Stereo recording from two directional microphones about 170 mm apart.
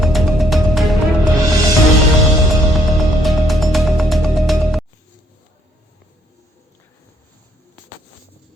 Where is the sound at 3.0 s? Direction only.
Centre (ahead or behind).